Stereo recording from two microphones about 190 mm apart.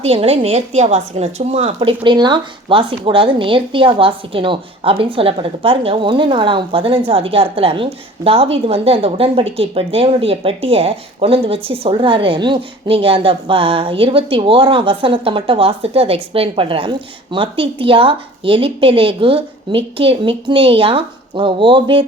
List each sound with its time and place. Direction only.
0.0 s speech: 30° right (ahead or behind)